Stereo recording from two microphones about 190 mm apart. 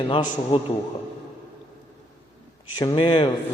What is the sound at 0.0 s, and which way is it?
Speech, 30° left (ahead or behind).